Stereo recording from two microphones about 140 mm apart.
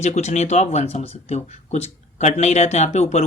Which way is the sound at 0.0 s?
55° left (ahead or behind).